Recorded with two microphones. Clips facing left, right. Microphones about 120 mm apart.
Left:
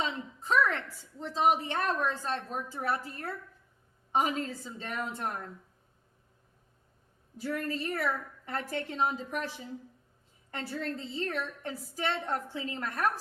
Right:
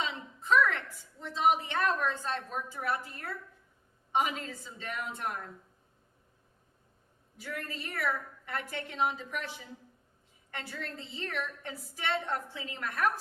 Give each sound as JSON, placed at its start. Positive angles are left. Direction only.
{"t": 0.0, "sound": "a woman's voice", "side_deg": 35}
{"t": 7.3, "sound": "a woman's voice", "side_deg": 35}